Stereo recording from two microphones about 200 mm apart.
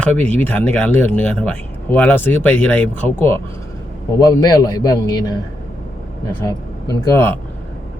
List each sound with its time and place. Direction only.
0.0 s a man's voice: 5° left (ahead or behind)
6.4 s speech: 15° left (ahead or behind)